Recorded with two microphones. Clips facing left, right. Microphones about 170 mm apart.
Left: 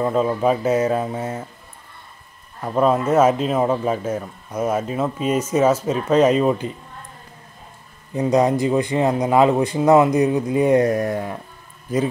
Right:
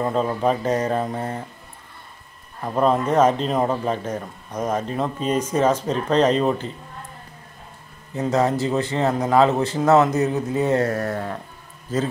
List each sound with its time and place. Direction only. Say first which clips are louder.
0.0 s speech: left 2 dB; 5° left (ahead or behind)
2.6 s a man's voice: left 2 dB; 5° left (ahead or behind)
8.1 s a man's voice: left 3 dB; 15° left (ahead or behind)